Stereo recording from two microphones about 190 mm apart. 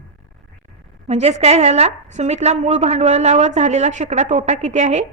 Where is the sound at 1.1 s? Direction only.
35° right (ahead or behind).